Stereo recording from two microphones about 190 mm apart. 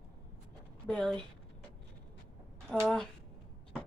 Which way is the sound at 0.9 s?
5° left (ahead or behind).